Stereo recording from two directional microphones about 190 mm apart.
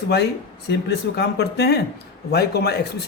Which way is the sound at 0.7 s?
60° left (ahead or behind).